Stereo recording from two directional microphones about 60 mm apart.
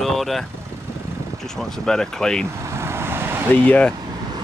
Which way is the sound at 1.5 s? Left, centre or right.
Centre.